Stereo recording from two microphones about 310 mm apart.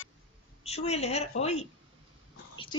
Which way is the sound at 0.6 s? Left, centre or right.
Centre.